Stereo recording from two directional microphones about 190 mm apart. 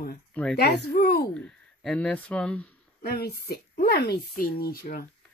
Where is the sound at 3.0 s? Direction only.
55° left (ahead or behind).